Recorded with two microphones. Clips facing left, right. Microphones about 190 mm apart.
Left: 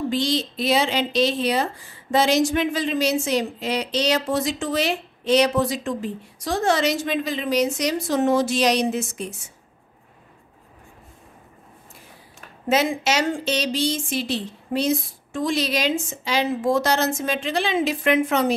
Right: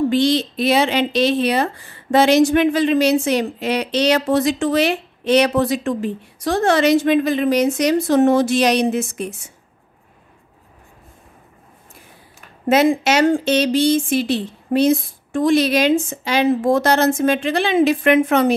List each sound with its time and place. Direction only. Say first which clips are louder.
0.1 s speech: right 7 dB; 65° right (ahead or behind)
12.6 s speech: right 6 dB; 55° right (ahead or behind)